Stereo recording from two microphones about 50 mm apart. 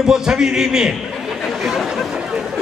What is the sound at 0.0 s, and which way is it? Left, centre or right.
Speech, centre.